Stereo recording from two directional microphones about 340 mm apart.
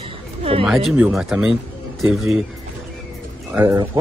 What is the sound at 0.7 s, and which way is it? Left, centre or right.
A man's voice, centre.